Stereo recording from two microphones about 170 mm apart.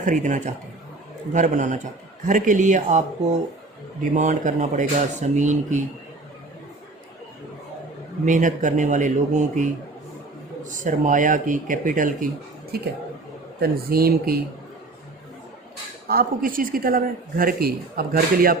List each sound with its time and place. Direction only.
0.0 s a man's voice: 45° right (ahead or behind)
8.2 s a man's voice: 50° right (ahead or behind)
12.7 s speech: 65° right (ahead or behind)
16.0 s speech: 60° right (ahead or behind)